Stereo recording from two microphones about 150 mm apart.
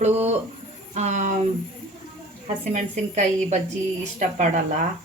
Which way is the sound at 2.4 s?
55° right (ahead or behind).